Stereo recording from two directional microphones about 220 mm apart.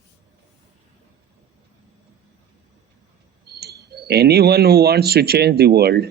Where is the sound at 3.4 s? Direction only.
45° right (ahead or behind).